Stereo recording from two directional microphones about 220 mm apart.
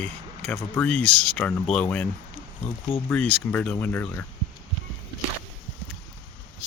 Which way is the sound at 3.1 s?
5° left (ahead or behind).